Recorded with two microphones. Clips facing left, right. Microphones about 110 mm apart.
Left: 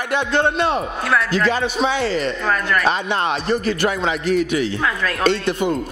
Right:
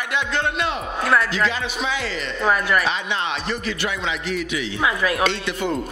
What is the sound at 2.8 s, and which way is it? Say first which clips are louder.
Speech: left 5 dB; 45° left (ahead or behind).